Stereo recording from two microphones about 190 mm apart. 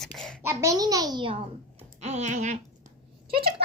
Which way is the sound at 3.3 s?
30° right (ahead or behind).